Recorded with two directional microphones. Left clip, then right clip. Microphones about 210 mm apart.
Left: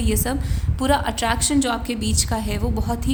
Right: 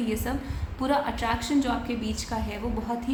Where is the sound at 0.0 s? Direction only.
50° left (ahead or behind).